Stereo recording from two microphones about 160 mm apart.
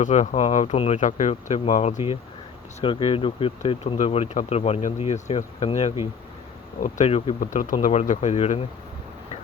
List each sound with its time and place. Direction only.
0.0 s speech: 45° left (ahead or behind)
2.8 s speech: 35° left (ahead or behind)
6.7 s speech: 55° left (ahead or behind)
7.1 s speech: 40° left (ahead or behind)
7.6 s speech: 55° left (ahead or behind)